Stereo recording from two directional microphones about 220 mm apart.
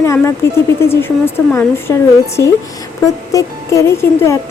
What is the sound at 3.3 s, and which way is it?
Speech, 15° left (ahead or behind).